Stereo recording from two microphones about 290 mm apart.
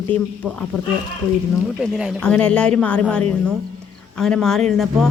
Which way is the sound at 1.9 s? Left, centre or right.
Centre.